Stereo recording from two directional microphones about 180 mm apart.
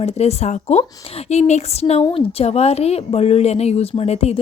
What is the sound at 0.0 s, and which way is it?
A woman's voice, 35° left (ahead or behind).